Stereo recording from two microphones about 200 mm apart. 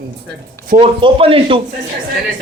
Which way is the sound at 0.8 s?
25° right (ahead or behind).